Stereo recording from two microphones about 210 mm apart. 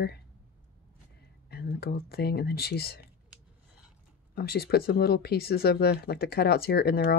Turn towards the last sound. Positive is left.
turn(degrees=50)  # may be behind; listen again after turning